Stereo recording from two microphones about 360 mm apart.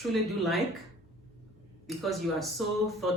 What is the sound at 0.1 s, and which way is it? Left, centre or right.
Speech, centre.